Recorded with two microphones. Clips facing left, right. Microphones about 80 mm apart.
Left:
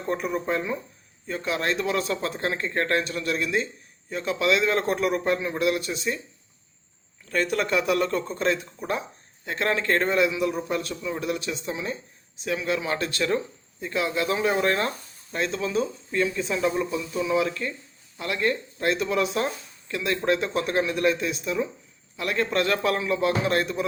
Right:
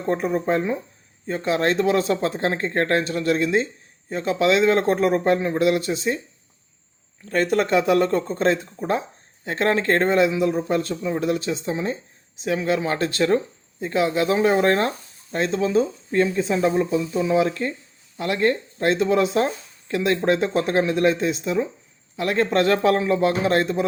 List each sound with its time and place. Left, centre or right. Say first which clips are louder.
0.0 s speech: right 5 dB; right
7.5 s speech: right 6 dB; right